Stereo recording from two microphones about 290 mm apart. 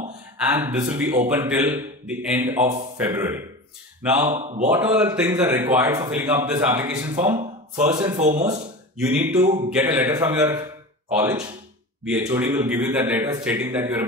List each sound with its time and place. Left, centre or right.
0.5 s a man's voice: centre
4.4 s speech: right
4.6 s a man's voice: centre
7.3 s speech: centre
8.9 s a man's voice: centre